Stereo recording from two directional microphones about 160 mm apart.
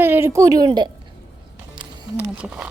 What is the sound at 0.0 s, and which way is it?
Speech, 15° right (ahead or behind).